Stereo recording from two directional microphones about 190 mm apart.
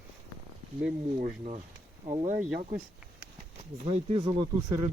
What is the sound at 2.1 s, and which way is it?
Speech, 35° right (ahead or behind).